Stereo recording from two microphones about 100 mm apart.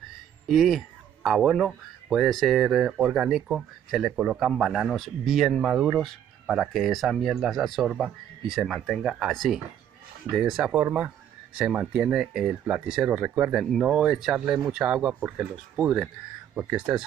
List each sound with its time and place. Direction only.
0.5 s speech: centre (ahead or behind)
10.8 s speech: 20° right (ahead or behind)
11.5 s speech: 10° right (ahead or behind)
16.5 s speech: 10° right (ahead or behind)